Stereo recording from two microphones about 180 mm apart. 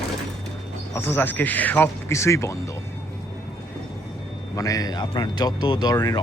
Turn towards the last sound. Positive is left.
turn(degrees=20)  # may be behind; listen again after turning